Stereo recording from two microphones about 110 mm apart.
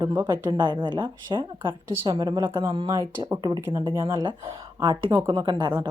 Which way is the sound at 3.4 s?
40° right (ahead or behind).